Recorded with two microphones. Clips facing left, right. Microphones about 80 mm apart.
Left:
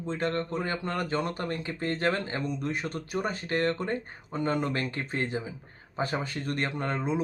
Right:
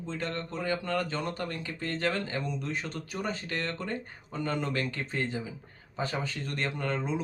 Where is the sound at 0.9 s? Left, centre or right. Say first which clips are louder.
Left 1 dB; centre.